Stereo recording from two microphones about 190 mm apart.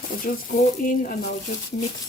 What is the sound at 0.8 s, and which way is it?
Speech, 45° left (ahead or behind).